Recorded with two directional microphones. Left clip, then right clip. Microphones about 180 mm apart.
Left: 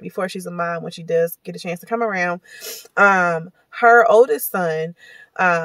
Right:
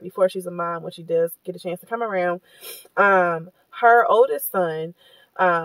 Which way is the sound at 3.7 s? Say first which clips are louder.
Left 3 dB; 20° left (ahead or behind).